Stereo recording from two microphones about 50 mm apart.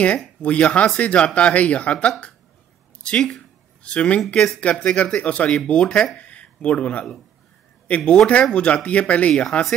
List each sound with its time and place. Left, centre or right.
0.4 s speech: left
3.1 s speech: centre
3.8 s speech: left
9.3 s speech: centre